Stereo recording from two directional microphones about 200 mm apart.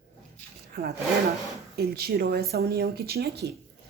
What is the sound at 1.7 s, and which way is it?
Speech, 50° right (ahead or behind).